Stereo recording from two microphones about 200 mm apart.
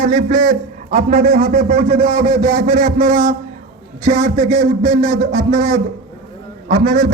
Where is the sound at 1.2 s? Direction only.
50° right (ahead or behind).